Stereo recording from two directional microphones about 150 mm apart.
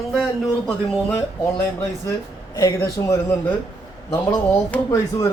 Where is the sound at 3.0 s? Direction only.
25° left (ahead or behind).